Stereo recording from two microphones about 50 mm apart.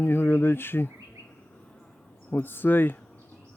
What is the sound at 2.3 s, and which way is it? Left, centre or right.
Speech, left.